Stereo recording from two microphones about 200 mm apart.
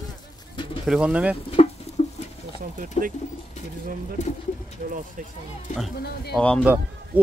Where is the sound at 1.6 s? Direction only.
30° left (ahead or behind).